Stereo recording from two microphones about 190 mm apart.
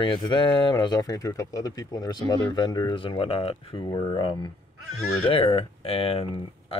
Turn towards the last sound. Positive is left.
turn(degrees=30)  # may be behind; listen again after turning